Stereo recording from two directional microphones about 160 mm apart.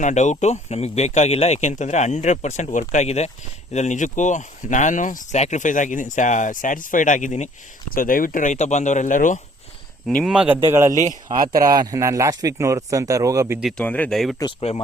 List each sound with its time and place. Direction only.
0.0 s speech: 50° left (ahead or behind)
7.9 s speech: 60° left (ahead or behind)
10.1 s a man's voice: centre (ahead or behind)
10.6 s a man's voice: 15° right (ahead or behind)
10.9 s speech: 50° right (ahead or behind)
11.6 s speech: 25° right (ahead or behind)
13.6 s a man's voice: centre (ahead or behind)
13.8 s a man's voice: 10° left (ahead or behind)